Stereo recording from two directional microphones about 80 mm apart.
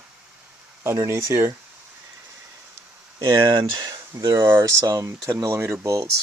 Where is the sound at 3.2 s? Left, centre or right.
Right.